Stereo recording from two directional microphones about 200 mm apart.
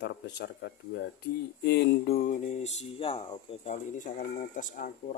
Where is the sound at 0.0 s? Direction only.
60° left (ahead or behind).